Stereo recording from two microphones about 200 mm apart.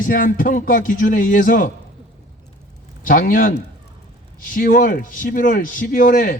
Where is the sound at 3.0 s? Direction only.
45° left (ahead or behind).